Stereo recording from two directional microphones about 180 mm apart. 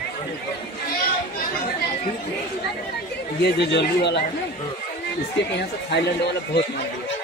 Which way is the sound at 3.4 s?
70° left (ahead or behind).